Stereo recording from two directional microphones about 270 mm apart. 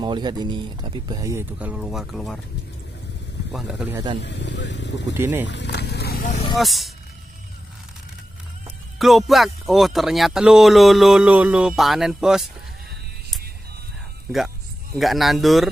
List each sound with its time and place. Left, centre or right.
0.0 s speech: centre
3.5 s speech: centre
4.2 s speech: left
5.1 s speech: centre
5.5 s vehicle: left
6.6 s speech: centre
8.9 s speech: centre
15.0 s speech: centre